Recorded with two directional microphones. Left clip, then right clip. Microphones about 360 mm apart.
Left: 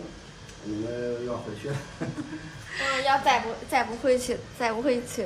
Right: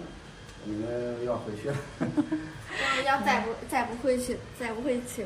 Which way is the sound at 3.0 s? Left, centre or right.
Centre.